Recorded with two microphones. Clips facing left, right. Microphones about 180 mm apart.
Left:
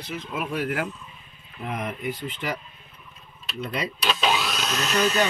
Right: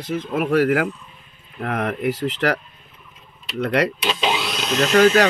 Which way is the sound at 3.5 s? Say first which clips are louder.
Right 10 dB; 75° right (ahead or behind).